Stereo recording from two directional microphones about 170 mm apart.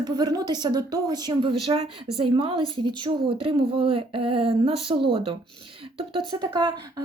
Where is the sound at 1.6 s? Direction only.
40° right (ahead or behind).